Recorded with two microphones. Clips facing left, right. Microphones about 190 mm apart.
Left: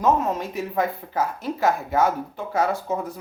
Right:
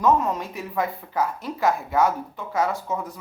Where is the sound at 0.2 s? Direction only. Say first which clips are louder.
Left 2 dB; 25° left (ahead or behind).